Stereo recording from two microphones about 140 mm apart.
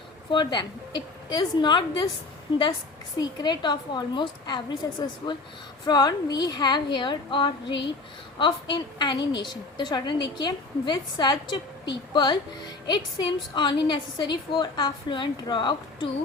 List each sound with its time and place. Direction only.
0.3 s speech: 35° left (ahead or behind)
3.2 s speech: 30° left (ahead or behind)